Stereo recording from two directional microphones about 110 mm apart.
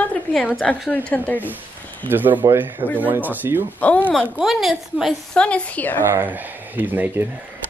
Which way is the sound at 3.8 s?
15° left (ahead or behind).